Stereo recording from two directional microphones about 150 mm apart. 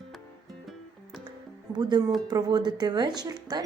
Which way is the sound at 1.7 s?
30° right (ahead or behind).